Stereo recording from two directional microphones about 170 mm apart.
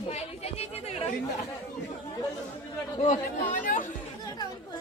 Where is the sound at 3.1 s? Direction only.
55° left (ahead or behind).